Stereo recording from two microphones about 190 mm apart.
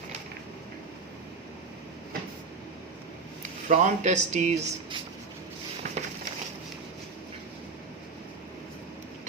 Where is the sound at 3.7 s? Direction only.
40° right (ahead or behind).